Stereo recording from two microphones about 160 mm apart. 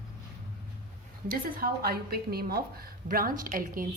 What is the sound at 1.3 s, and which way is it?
A woman's voice, 65° right (ahead or behind).